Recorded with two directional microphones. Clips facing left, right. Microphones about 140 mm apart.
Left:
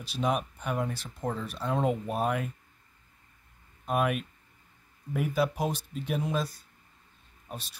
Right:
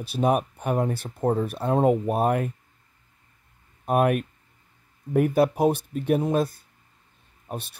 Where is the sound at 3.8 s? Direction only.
50° right (ahead or behind).